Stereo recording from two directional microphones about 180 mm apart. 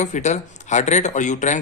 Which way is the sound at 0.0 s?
40° left (ahead or behind).